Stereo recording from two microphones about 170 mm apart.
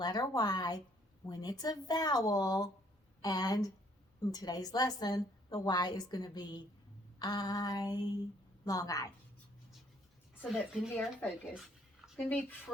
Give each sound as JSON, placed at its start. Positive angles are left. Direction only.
{"t": 0.0, "sound": "a woman's voice", "side_deg": 25}
{"t": 10.5, "sound": "a woman's voice", "side_deg": 5}